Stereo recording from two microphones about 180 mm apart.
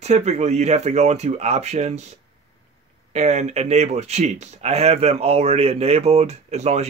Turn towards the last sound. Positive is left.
turn(degrees=-35)  # may be behind; listen again after turning